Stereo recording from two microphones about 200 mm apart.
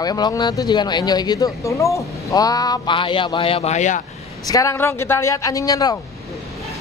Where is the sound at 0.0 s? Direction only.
20° left (ahead or behind); by 4.0 s 35° left (ahead or behind).